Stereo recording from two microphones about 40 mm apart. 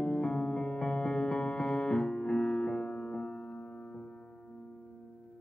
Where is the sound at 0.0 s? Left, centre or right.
Centre.